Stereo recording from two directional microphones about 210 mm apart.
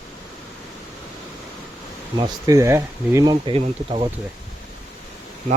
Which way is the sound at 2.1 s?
15° right (ahead or behind).